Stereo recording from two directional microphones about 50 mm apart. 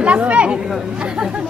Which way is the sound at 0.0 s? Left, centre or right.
Right.